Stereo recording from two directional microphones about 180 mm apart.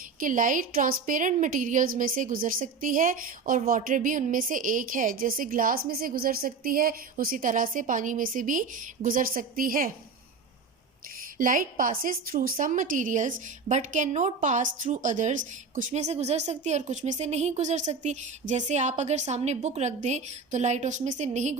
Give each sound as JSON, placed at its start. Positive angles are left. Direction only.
{"t": 0.2, "sound": "a woman's voice", "side_deg": -45}
{"t": 11.3, "sound": "a woman's voice", "side_deg": -50}